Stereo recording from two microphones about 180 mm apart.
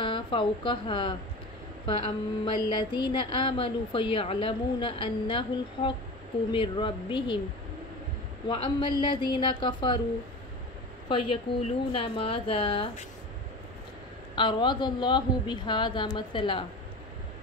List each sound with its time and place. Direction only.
0.0 s a woman's voice: 30° left (ahead or behind)
8.5 s speech: 25° left (ahead or behind)
11.6 s speech: 30° left (ahead or behind)
14.3 s speech: 25° left (ahead or behind)